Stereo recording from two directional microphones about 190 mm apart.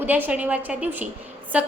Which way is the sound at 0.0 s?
10° right (ahead or behind).